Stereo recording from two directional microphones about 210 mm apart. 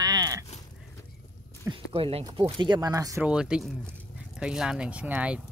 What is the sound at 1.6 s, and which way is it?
Speech, 25° right (ahead or behind).